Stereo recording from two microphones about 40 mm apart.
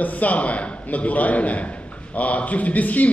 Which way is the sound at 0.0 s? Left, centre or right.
Left.